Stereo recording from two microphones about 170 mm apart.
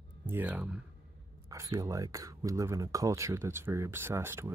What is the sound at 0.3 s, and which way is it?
Speech, 10° right (ahead or behind).